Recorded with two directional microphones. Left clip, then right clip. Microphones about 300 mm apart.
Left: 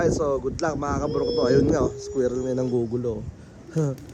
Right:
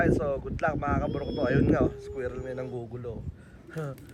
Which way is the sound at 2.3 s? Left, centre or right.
Left.